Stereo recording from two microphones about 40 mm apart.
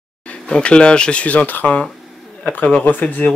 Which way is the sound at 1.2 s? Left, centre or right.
Left.